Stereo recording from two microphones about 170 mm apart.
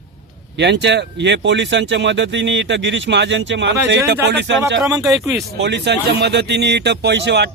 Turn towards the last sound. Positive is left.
turn(degrees=-80)